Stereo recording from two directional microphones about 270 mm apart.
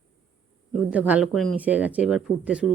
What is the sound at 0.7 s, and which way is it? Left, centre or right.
Speech, centre.